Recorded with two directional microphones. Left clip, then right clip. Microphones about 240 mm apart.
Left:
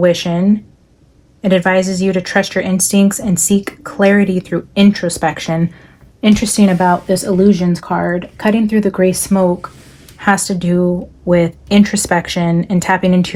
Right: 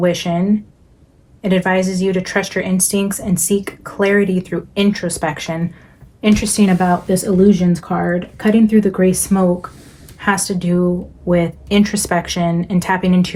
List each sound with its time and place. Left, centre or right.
0.0 s speech: left